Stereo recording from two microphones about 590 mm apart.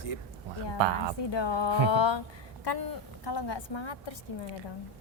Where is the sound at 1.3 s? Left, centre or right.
Left.